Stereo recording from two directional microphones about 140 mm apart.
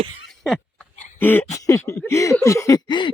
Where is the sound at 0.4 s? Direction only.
5° left (ahead or behind).